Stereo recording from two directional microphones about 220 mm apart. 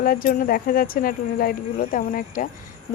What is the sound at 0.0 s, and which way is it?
Speech, 40° left (ahead or behind).